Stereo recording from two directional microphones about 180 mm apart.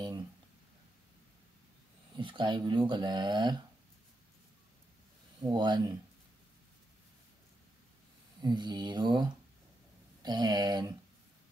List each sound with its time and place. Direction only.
2.1 s speech: 25° right (ahead or behind)
5.4 s speech: 25° right (ahead or behind)
8.4 s speech: 25° right (ahead or behind)